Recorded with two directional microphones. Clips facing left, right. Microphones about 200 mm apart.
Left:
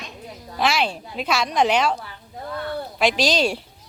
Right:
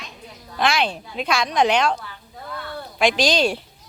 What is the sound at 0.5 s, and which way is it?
A woman's voice, 5° left (ahead or behind).